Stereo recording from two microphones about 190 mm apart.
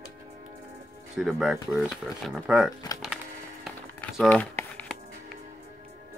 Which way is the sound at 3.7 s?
Centre (ahead or behind).